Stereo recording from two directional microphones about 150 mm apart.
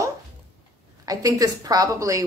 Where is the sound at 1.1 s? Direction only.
25° right (ahead or behind).